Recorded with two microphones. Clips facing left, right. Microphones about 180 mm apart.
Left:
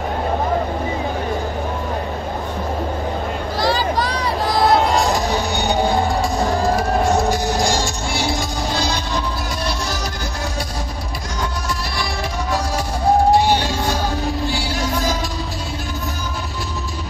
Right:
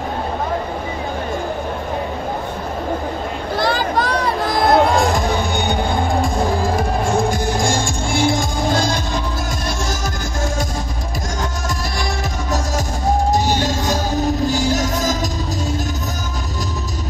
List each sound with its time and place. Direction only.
3.5 s music: 55° right (ahead or behind)
13.3 s music: 45° right (ahead or behind)